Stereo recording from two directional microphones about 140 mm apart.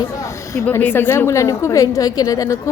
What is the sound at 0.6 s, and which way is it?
A woman's voice, 15° left (ahead or behind).